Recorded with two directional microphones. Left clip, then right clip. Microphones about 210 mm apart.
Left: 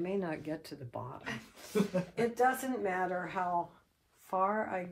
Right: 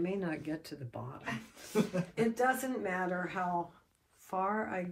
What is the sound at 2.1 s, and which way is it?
Speech, 30° left (ahead or behind).